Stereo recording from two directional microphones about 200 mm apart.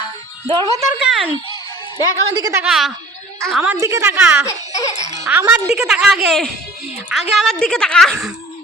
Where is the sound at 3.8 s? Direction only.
15° right (ahead or behind).